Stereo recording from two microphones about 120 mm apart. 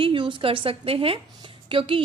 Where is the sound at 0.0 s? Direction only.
45° right (ahead or behind).